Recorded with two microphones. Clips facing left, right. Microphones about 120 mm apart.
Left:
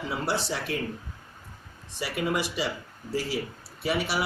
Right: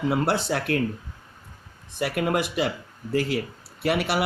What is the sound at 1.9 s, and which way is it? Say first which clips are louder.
Speech: right 4 dB; 55° right (ahead or behind).